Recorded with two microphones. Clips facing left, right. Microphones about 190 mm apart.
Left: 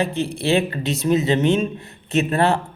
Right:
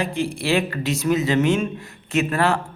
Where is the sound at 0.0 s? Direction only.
25° left (ahead or behind).